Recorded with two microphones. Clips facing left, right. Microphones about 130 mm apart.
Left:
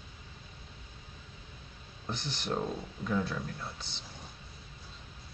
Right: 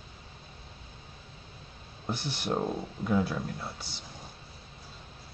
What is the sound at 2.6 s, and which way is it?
Speech, 25° right (ahead or behind).